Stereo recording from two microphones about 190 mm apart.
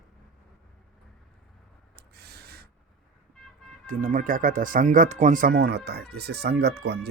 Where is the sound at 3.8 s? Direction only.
45° right (ahead or behind).